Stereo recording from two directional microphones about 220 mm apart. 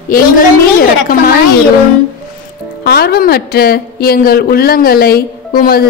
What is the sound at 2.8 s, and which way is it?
A woman's voice, 45° left (ahead or behind).